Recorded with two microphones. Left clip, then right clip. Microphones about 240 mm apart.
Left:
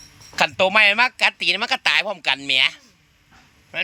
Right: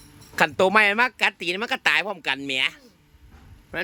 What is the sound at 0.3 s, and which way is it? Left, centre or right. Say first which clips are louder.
A man's voice: left 2 dB; centre.